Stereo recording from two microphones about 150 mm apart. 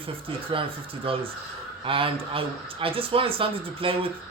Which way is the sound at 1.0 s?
35° right (ahead or behind).